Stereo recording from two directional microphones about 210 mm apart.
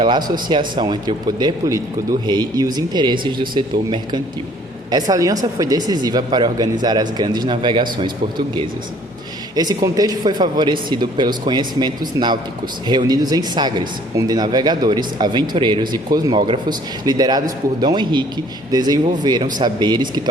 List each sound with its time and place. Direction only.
0.0 s speech: 20° right (ahead or behind)